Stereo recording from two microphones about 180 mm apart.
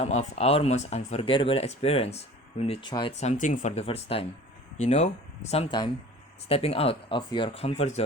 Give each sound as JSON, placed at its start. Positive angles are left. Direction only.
{"t": 0.0, "sound": "speech", "side_deg": 40}
{"t": 3.2, "sound": "speech", "side_deg": 40}